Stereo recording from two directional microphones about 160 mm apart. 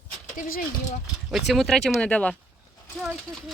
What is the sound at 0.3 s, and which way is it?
Speech, 60° left (ahead or behind).